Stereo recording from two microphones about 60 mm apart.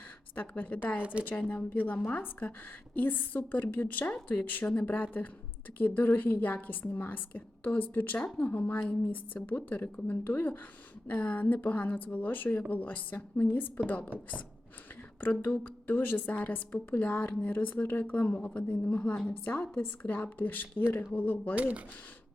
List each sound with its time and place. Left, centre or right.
0.3 s a woman's voice: left
2.9 s a woman's voice: left
15.2 s a woman's voice: left
21.5 s speech: right